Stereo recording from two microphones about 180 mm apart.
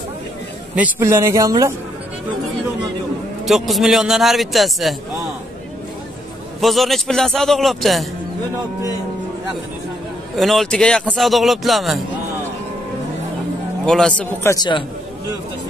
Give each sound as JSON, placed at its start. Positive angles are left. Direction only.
{"t": 0.7, "sound": "a man's voice", "side_deg": -10}
{"t": 3.4, "sound": "a man's voice", "side_deg": 0}
{"t": 6.6, "sound": "a man's voice", "side_deg": 0}
{"t": 10.3, "sound": "a man's voice", "side_deg": 0}
{"t": 13.8, "sound": "a man's voice", "side_deg": 5}
{"t": 14.5, "sound": "a man's voice", "side_deg": 25}